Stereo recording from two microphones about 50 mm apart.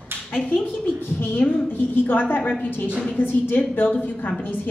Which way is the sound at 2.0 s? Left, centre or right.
Left.